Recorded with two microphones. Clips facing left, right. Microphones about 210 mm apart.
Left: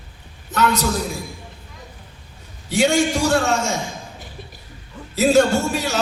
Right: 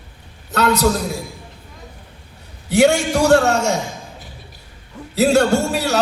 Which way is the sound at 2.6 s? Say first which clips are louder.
Right 3 dB; 65° right (ahead or behind).